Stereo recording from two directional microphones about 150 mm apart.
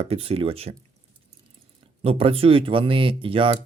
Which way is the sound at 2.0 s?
40° right (ahead or behind).